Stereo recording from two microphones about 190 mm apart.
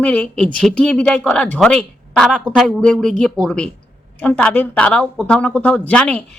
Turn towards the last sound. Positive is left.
turn(degrees=5)  # may be behind; listen again after turning